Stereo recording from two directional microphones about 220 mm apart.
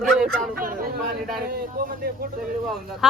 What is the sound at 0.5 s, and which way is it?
Speech, 40° right (ahead or behind).